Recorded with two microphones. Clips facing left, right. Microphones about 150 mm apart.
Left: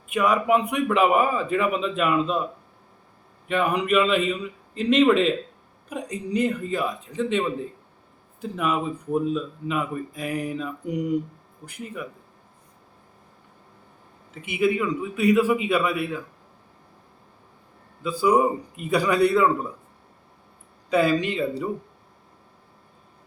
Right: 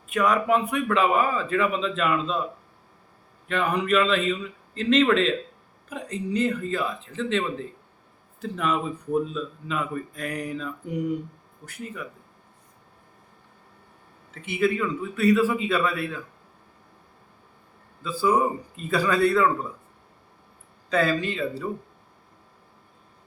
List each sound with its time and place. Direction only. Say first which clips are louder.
0.1 s a man's voice: left 1 dB; 10° left (ahead or behind)
3.5 s a man's voice: left 2 dB; 10° left (ahead or behind)
14.4 s a man's voice: left 1 dB; 10° left (ahead or behind)
18.0 s a man's voice: left 3 dB; 15° left (ahead or behind)
20.9 s a man's voice: left 3 dB; 15° left (ahead or behind)